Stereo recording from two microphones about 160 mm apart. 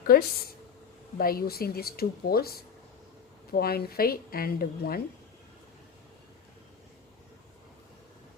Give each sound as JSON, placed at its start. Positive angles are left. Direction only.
{"t": 0.1, "sound": "a woman's voice", "side_deg": 70}
{"t": 3.5, "sound": "a woman's voice", "side_deg": 75}